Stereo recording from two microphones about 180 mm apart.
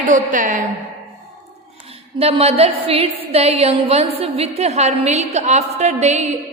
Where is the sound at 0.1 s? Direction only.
45° right (ahead or behind).